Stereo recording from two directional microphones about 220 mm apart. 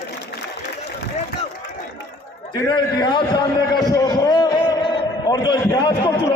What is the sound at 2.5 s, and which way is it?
A man's voice, 20° left (ahead or behind).